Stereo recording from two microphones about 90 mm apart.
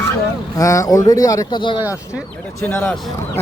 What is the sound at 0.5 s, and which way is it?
Speech, 35° left (ahead or behind).